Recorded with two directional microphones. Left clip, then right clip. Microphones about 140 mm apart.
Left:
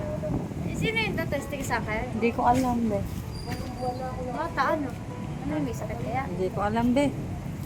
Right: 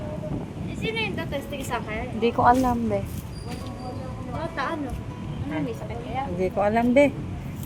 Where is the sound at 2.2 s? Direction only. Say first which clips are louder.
Right 5 dB; 30° right (ahead or behind).